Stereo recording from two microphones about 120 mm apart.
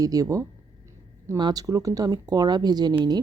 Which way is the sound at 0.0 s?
30° right (ahead or behind).